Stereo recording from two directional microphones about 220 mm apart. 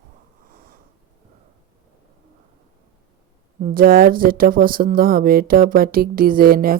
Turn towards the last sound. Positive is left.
turn(degrees=-40)  # may be behind; listen again after turning